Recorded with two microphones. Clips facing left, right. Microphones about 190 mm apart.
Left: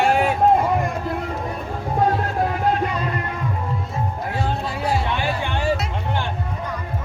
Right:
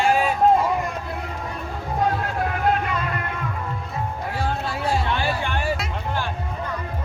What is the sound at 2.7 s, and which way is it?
Music, 35° left (ahead or behind).